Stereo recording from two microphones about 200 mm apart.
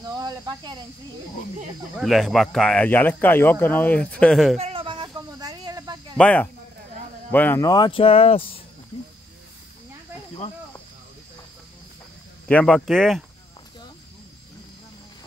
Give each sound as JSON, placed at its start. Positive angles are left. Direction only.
{"t": 0.0, "sound": "cricket", "side_deg": -20}
{"t": 2.0, "sound": "speech", "side_deg": 0}
{"t": 4.6, "sound": "a sound", "side_deg": -30}
{"t": 6.1, "sound": "speech", "side_deg": 5}
{"t": 12.4, "sound": "speech", "side_deg": 5}